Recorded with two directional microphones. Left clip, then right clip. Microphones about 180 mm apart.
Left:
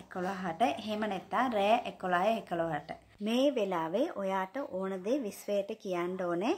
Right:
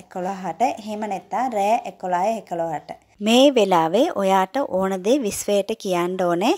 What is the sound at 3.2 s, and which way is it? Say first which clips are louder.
Speech: right 14 dB; 60° right (ahead or behind).